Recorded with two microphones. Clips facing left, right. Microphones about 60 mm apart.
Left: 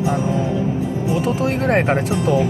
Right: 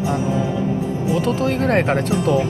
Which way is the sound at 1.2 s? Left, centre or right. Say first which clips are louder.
Right 1 dB; centre.